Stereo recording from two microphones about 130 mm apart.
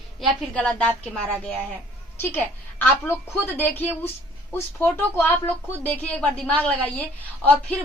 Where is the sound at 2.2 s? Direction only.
15° left (ahead or behind).